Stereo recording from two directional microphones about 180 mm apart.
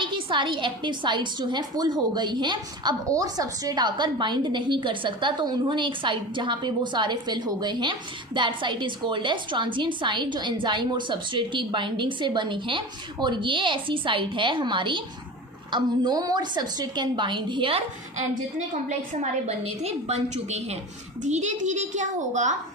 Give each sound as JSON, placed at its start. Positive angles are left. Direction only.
{"t": 0.0, "sound": "a woman's voice", "side_deg": -25}